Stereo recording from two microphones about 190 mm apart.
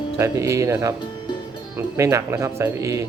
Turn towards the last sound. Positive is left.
turn(degrees=-15)  # may be behind; listen again after turning